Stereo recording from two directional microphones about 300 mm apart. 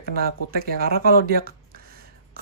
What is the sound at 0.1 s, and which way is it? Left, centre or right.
Speech, right.